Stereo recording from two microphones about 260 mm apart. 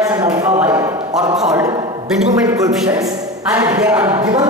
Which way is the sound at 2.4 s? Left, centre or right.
Centre.